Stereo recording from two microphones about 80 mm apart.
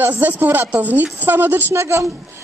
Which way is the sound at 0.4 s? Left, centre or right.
Right.